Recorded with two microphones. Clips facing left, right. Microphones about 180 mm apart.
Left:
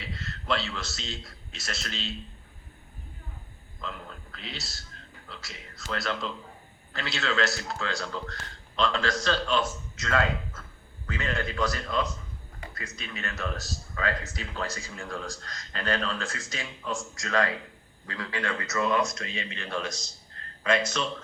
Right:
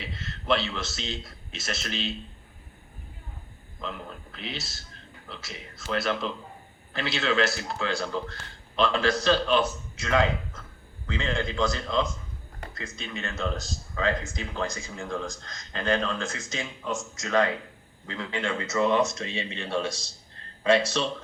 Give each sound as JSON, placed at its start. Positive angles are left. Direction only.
{"t": 0.0, "sound": "a man's voice", "side_deg": -20}
{"t": 3.8, "sound": "a man's voice", "side_deg": -20}